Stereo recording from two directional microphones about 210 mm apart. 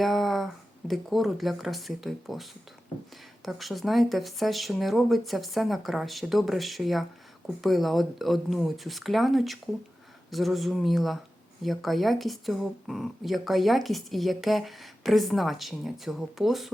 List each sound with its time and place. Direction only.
0.0 s speech: centre (ahead or behind)